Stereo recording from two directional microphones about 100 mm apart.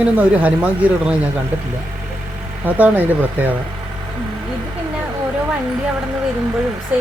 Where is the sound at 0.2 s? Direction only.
15° right (ahead or behind).